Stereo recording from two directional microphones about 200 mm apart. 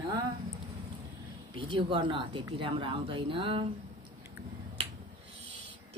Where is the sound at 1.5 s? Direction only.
25° right (ahead or behind).